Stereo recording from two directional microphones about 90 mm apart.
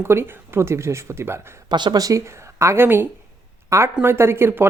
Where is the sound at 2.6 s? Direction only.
30° right (ahead or behind).